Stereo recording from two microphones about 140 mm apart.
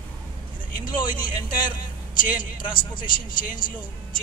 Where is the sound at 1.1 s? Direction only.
75° left (ahead or behind).